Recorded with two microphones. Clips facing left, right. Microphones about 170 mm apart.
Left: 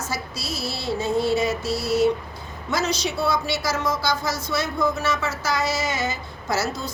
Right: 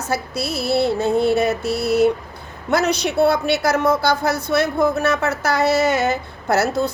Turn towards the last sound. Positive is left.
turn(degrees=-65)  # may be behind; listen again after turning